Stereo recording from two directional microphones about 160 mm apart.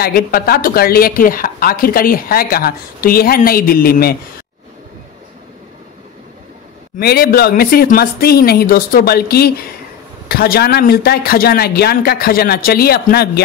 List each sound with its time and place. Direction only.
0.0 s a woman's voice: 70° left (ahead or behind)
7.0 s a woman's voice: 75° left (ahead or behind)